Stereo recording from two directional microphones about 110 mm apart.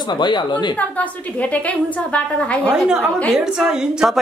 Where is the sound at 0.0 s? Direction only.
45° left (ahead or behind).